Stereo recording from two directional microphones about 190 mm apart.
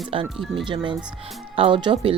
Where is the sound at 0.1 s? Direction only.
30° right (ahead or behind).